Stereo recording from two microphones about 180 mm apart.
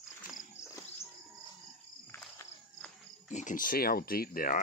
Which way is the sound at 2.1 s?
15° left (ahead or behind).